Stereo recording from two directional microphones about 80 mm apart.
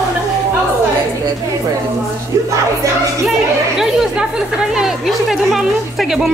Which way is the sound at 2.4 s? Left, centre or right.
Right.